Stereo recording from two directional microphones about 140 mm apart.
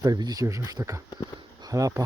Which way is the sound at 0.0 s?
25° right (ahead or behind).